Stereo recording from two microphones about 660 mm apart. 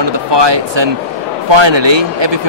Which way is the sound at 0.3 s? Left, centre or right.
Right.